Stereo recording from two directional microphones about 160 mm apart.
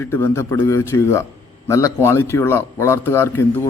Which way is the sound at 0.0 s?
15° left (ahead or behind).